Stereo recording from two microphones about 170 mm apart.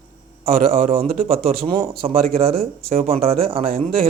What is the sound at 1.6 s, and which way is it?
Speech, 30° right (ahead or behind).